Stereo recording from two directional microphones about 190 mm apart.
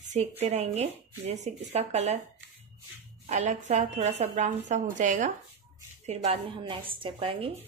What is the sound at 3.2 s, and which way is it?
Speech, 40° right (ahead or behind).